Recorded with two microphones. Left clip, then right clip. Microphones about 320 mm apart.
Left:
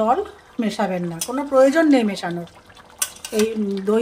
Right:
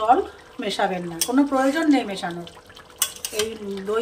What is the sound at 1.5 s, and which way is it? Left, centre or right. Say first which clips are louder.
Speech: left 10 dB; left.